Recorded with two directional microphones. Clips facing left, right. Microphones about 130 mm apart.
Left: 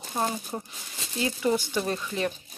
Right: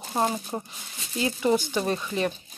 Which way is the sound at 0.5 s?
15° right (ahead or behind).